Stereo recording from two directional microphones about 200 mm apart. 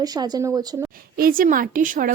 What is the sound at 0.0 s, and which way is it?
Speech, 20° right (ahead or behind).